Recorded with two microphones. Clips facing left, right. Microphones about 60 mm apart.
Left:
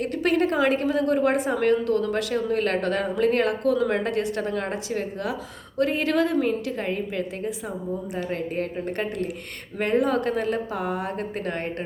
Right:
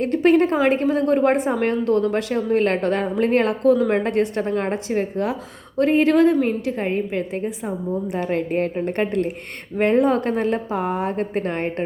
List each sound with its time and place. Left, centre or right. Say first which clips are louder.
0.0 s a woman's voice: right 6 dB; right
8.1 s speech: right 6 dB; right